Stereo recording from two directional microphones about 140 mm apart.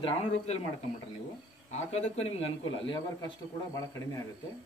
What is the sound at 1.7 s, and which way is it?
Speech, 55° left (ahead or behind).